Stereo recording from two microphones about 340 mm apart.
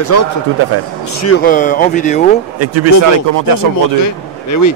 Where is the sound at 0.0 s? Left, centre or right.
Left.